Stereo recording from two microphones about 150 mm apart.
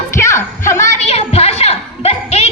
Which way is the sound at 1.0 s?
45° left (ahead or behind).